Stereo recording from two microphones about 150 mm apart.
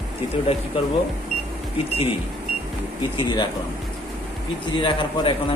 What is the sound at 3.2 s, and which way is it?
Speech, 30° left (ahead or behind).